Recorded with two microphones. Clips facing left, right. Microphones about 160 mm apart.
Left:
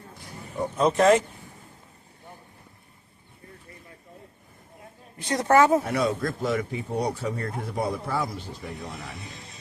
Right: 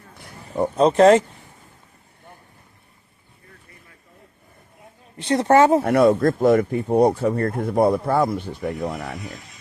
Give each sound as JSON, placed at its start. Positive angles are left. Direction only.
{"t": 0.2, "sound": "a sound", "side_deg": -60}
{"t": 0.8, "sound": "speech", "side_deg": -30}
{"t": 5.2, "sound": "speech", "side_deg": -25}
{"t": 5.8, "sound": "speech", "side_deg": -55}
{"t": 9.3, "sound": "speech", "side_deg": 30}